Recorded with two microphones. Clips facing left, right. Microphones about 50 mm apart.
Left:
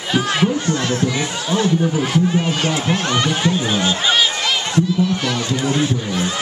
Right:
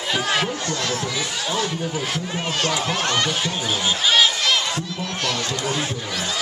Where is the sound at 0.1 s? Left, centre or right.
Centre.